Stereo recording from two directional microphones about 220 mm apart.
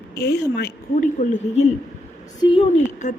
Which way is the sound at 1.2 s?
30° left (ahead or behind).